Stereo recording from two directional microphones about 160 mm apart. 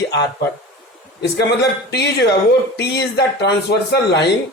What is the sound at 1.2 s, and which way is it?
Speech, 90° left.